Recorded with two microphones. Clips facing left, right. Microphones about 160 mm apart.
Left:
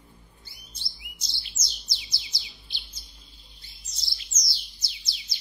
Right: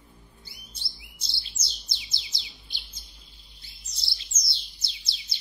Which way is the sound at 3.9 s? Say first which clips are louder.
Even; 30° right (ahead or behind).